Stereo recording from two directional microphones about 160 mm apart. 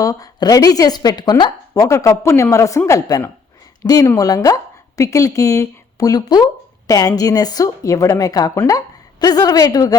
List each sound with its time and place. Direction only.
0.0 s a woman's voice: 20° left (ahead or behind)